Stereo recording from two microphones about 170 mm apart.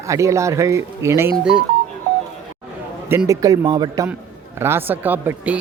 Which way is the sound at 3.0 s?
15° right (ahead or behind).